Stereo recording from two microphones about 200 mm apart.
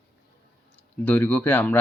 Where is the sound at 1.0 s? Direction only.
10° left (ahead or behind).